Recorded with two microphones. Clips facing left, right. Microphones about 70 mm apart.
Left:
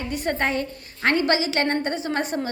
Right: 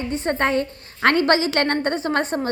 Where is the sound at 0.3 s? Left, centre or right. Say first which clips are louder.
Right 4 dB; right.